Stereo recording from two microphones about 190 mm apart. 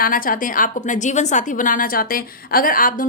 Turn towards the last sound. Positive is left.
turn(degrees=45)  # may be behind; listen again after turning